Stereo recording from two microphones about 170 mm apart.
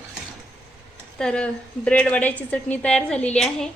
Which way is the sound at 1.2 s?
5° left (ahead or behind).